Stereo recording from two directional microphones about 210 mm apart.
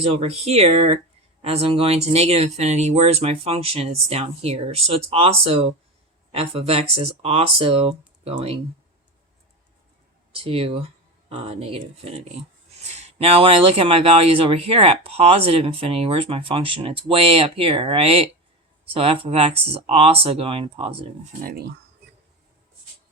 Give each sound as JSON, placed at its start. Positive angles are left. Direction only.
{"t": 0.0, "sound": "speech", "side_deg": -30}
{"t": 10.3, "sound": "speech", "side_deg": -25}
{"t": 21.4, "sound": "speech", "side_deg": -50}